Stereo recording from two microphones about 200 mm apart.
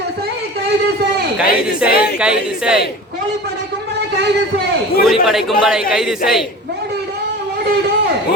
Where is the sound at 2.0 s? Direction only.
5° right (ahead or behind).